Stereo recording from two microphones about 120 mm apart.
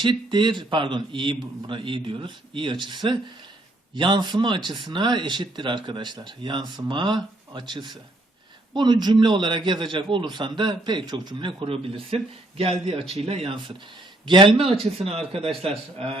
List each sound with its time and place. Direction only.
0.0 s a man's voice: 40° right (ahead or behind)